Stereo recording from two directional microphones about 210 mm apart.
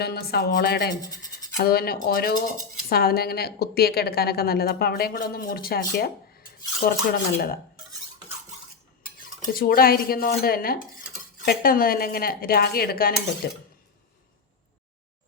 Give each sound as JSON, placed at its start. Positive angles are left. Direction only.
{"t": 0.0, "sound": "a woman's voice", "side_deg": 50}
{"t": 9.5, "sound": "a woman's voice", "side_deg": 45}